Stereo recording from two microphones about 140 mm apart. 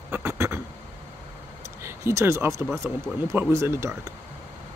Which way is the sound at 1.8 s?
20° right (ahead or behind).